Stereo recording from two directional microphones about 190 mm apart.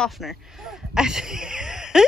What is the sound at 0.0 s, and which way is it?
Speech, centre (ahead or behind).